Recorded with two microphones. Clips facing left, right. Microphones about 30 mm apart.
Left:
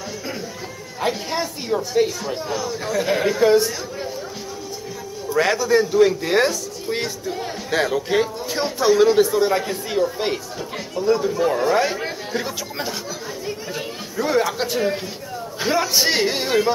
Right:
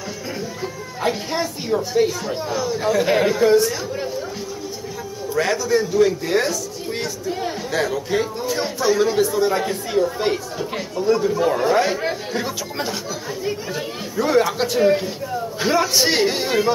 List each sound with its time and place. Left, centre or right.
1.0 s a man's voice: centre
5.3 s a man's voice: centre
7.7 s a man's voice: left
8.2 s a man's voice: centre